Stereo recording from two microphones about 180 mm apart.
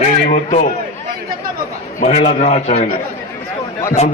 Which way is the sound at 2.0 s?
40° left (ahead or behind).